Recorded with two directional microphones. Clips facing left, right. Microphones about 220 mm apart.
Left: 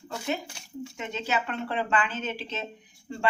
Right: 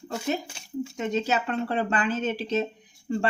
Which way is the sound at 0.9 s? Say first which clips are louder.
Right 4 dB; 40° right (ahead or behind).